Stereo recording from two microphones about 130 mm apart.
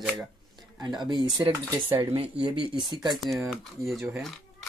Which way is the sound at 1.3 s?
30° right (ahead or behind).